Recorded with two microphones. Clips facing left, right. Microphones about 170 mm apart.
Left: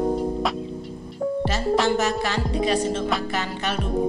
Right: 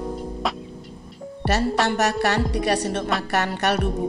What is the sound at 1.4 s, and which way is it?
Music, 65° right (ahead or behind).